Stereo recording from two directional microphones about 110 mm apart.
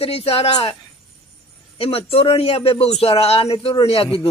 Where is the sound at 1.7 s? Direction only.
65° left (ahead or behind).